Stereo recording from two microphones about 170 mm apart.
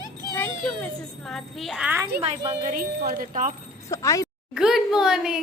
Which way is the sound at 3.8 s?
20° left (ahead or behind).